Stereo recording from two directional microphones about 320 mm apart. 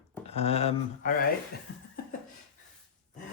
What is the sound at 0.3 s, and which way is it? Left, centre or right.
Speech, centre.